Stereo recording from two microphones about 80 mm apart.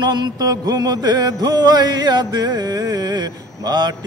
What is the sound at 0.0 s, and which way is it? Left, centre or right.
Speech, right.